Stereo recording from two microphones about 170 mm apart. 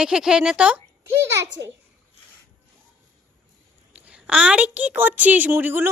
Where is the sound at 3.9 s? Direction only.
10° right (ahead or behind).